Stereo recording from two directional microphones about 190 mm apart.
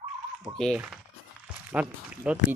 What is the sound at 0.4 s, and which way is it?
Speech, 5° right (ahead or behind).